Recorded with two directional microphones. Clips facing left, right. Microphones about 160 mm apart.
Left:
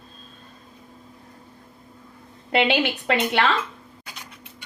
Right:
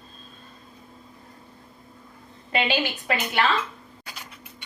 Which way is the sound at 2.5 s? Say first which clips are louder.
Left 4 dB; 75° left (ahead or behind).